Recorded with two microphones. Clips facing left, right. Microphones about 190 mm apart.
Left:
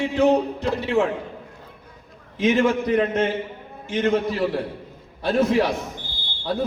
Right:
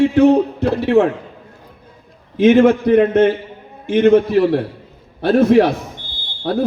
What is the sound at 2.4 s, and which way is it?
A man's voice, 60° right (ahead or behind).